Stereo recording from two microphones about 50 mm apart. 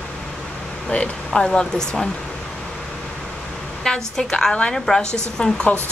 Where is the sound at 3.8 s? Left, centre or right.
Centre.